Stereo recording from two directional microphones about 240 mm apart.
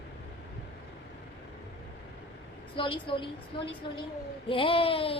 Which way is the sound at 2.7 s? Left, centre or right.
Left.